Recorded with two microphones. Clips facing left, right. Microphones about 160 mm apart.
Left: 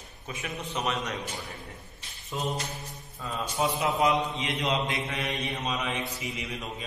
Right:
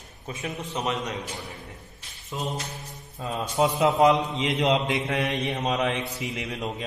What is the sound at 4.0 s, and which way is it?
Speech, 80° right.